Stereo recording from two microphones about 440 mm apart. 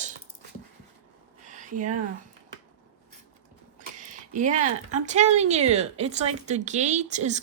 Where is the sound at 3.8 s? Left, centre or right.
Centre.